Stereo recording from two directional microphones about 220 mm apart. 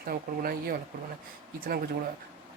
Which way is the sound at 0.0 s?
40° right (ahead or behind).